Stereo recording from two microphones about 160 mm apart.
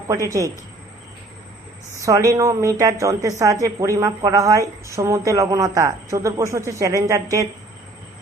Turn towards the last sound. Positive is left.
turn(degrees=-20)  # may be behind; listen again after turning